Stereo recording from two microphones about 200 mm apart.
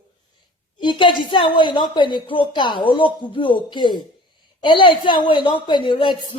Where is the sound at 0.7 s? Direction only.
25° left (ahead or behind).